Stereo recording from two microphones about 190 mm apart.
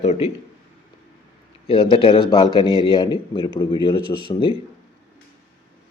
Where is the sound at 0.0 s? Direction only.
35° left (ahead or behind).